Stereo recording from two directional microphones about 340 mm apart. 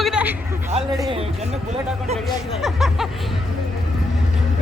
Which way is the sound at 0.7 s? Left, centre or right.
Centre.